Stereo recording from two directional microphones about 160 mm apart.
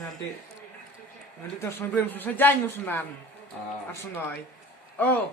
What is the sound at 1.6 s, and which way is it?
A man's voice, 15° left (ahead or behind).